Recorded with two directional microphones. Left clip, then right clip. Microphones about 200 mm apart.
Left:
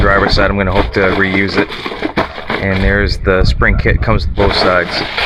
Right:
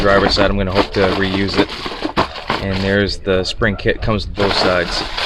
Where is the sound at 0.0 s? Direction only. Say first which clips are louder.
Left 2 dB; 10° right (ahead or behind).